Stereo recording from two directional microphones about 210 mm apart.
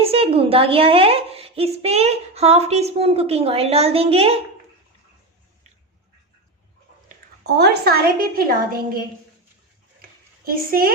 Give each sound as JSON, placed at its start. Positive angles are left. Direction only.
{"t": 0.0, "sound": "a woman's voice", "side_deg": -25}
{"t": 7.1, "sound": "a woman's voice", "side_deg": -50}
{"t": 10.0, "sound": "a sound", "side_deg": -45}